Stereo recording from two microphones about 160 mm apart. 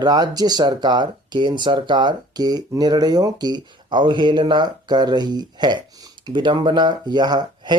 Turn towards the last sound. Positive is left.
turn(degrees=-25)  # may be behind; listen again after turning